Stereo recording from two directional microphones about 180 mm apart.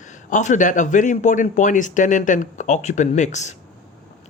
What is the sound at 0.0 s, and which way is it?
Speech, 45° left (ahead or behind).